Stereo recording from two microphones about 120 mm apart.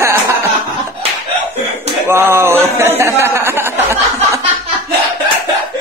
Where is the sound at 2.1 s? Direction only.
20° right (ahead or behind).